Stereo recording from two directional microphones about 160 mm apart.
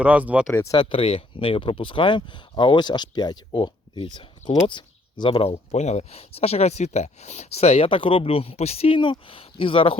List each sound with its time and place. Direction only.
0.0 s speech: 10° right (ahead or behind)
0.5 s speech: 20° left (ahead or behind)
0.8 s speech: 35° left (ahead or behind)